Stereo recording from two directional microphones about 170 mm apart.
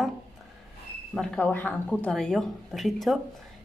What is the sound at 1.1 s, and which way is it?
Speech, 5° left (ahead or behind).